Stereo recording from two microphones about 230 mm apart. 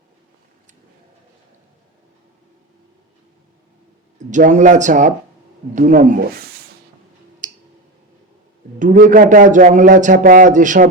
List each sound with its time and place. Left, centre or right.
4.2 s a man's voice: right
7.4 s clicking: right
8.8 s a man's voice: right